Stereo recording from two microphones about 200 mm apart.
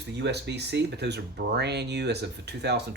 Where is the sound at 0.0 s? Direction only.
55° right (ahead or behind).